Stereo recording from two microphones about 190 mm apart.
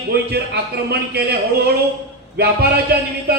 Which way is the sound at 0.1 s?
60° right (ahead or behind).